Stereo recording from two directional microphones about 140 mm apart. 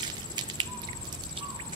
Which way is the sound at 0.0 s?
30° right (ahead or behind).